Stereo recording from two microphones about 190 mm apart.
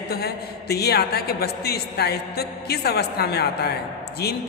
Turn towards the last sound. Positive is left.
turn(degrees=55)  # may be behind; listen again after turning